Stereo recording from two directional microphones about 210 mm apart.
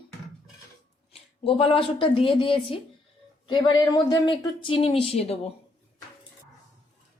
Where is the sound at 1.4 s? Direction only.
25° left (ahead or behind).